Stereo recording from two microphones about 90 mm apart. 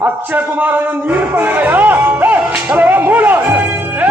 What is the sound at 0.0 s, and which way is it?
A man's voice, 20° right (ahead or behind).